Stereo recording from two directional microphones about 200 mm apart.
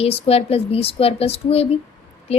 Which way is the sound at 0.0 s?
30° left (ahead or behind).